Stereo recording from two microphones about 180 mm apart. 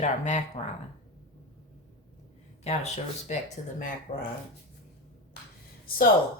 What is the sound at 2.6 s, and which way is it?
Speech, 40° left (ahead or behind).